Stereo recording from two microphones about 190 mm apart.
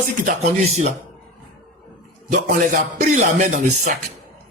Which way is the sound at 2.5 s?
45° right (ahead or behind).